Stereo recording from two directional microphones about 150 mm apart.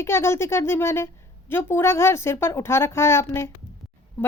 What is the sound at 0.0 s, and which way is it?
A woman's voice, 15° left (ahead or behind).